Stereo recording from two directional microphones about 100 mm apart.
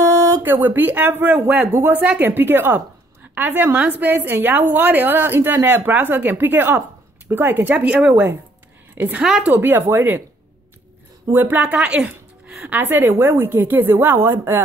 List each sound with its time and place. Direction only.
0.2 s a woman's voice: 20° right (ahead or behind)
9.2 s speech: 5° right (ahead or behind)
9.5 s a woman's voice: 20° right (ahead or behind)
11.3 s a woman's voice: 20° right (ahead or behind)